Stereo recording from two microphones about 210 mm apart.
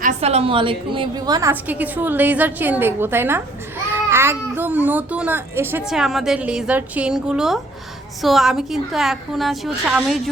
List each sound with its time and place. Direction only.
0.0 s a child's voice: 30° right (ahead or behind); by 10.2 s centre (ahead or behind)